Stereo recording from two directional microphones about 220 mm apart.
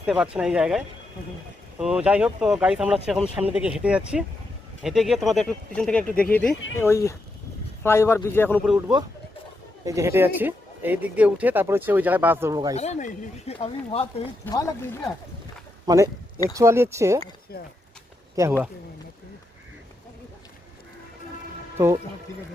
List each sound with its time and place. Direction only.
0.0 s speech: 5° right (ahead or behind)
1.8 s a man's voice: 5° right (ahead or behind)
9.8 s speech: 15° right (ahead or behind)
12.7 s speech: 30° left (ahead or behind)
14.4 s a man's voice: 15° left (ahead or behind)
15.9 s speech: 15° right (ahead or behind)